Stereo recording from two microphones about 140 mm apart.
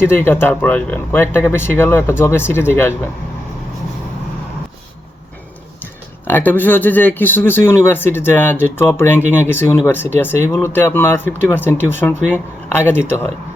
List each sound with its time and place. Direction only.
0.0 s speech: 15° left (ahead or behind)
5.8 s speech: 15° left (ahead or behind)